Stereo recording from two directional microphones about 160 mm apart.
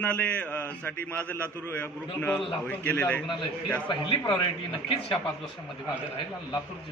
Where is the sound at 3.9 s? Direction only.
30° left (ahead or behind).